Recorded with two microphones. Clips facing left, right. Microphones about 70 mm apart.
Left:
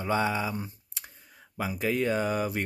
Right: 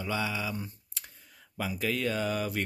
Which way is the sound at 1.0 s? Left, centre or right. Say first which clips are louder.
Left 1 dB; centre.